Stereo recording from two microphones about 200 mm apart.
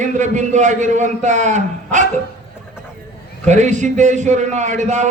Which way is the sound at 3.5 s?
35° right (ahead or behind).